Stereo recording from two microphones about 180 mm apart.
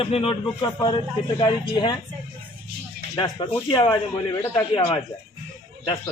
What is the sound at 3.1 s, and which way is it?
Speech, 25° left (ahead or behind).